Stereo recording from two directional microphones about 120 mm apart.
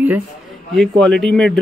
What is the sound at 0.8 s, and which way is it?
Speech, 5° left (ahead or behind).